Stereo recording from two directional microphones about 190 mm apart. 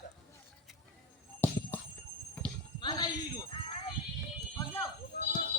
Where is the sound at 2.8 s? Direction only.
20° left (ahead or behind).